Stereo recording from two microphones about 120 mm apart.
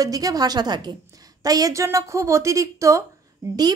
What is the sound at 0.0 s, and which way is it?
A woman's voice, 30° right (ahead or behind).